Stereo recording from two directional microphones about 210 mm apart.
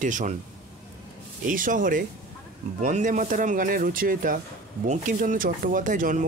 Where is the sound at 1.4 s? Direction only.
40° right (ahead or behind).